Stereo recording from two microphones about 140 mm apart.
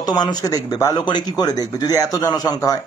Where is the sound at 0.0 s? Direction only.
30° left (ahead or behind).